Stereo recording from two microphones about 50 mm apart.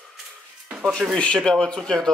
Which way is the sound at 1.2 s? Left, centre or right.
Centre.